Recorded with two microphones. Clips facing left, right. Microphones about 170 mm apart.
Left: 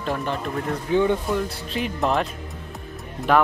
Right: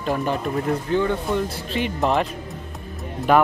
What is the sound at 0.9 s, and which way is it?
Speech, 15° left (ahead or behind).